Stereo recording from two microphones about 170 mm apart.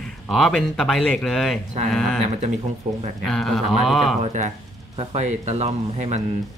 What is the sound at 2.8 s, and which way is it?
Speech, 45° right (ahead or behind).